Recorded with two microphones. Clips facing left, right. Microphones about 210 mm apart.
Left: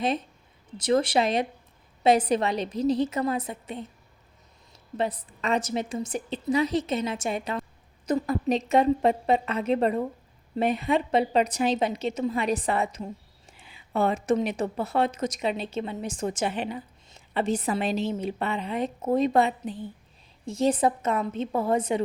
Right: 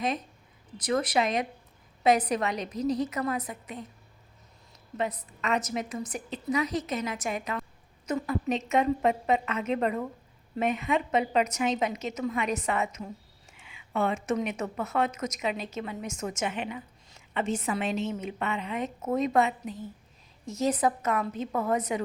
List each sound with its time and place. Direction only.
0.8 s a woman's voice: 30° left (ahead or behind)
4.9 s a woman's voice: 30° left (ahead or behind)